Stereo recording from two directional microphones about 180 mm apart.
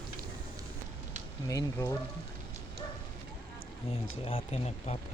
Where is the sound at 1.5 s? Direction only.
20° left (ahead or behind).